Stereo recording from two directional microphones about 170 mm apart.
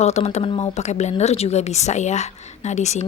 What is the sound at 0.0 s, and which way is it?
Speech, 40° left (ahead or behind).